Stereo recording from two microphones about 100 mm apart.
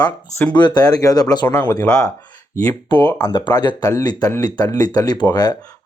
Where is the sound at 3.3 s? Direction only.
45° left (ahead or behind).